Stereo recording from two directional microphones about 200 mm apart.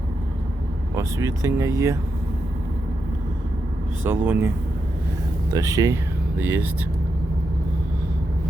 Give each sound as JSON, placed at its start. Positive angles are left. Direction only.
{"t": 0.9, "sound": "speech", "side_deg": -15}
{"t": 4.0, "sound": "speech", "side_deg": -10}